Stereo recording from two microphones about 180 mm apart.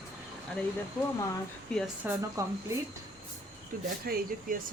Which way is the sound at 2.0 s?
15° right (ahead or behind).